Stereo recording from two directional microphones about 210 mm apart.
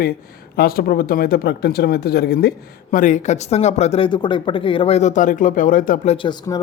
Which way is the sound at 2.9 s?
35° left (ahead or behind).